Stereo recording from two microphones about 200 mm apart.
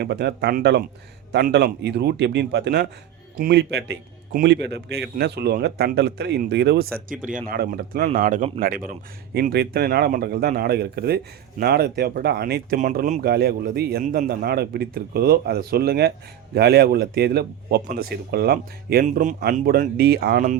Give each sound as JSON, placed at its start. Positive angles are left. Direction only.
{"t": 0.0, "sound": "a man's voice", "side_deg": -55}
{"t": 12.8, "sound": "a man's voice", "side_deg": -40}